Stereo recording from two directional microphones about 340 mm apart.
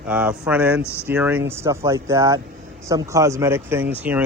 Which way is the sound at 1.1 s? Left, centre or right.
Centre.